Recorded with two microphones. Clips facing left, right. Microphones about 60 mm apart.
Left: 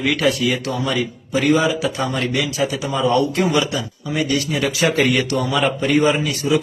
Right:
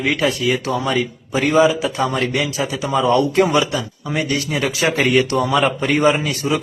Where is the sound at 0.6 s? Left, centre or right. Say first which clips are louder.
Right 2 dB; right.